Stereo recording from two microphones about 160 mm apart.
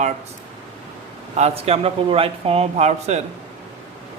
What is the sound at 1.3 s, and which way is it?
Speech, 40° right (ahead or behind).